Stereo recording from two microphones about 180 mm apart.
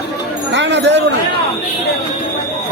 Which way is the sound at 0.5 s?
80° right.